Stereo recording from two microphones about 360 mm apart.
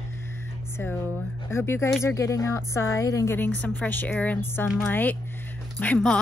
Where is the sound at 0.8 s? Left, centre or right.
Centre.